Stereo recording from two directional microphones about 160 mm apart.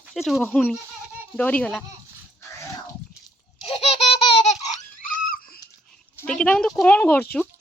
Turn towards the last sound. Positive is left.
turn(degrees=10)  # may be behind; listen again after turning